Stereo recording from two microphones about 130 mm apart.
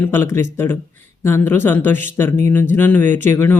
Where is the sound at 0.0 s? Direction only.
20° left (ahead or behind).